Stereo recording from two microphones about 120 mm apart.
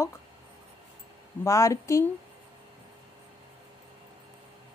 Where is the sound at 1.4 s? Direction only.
25° left (ahead or behind).